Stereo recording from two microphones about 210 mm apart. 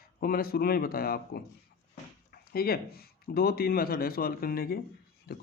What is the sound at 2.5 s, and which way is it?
Speech, 45° left (ahead or behind).